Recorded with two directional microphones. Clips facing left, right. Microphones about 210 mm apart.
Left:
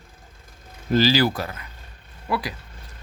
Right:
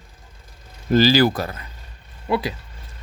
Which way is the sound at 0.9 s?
45° right (ahead or behind).